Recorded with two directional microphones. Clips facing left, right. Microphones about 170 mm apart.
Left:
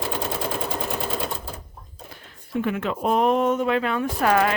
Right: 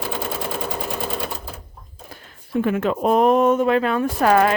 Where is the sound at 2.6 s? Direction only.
45° right (ahead or behind).